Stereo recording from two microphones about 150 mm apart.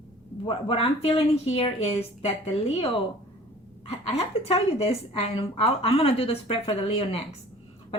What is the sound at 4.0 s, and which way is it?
A woman's voice, 45° left (ahead or behind).